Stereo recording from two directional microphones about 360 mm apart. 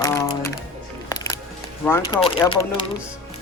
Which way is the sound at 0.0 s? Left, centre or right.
Centre.